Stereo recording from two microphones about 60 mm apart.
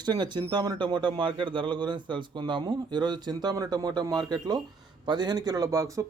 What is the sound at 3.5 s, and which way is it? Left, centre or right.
A man's voice, right.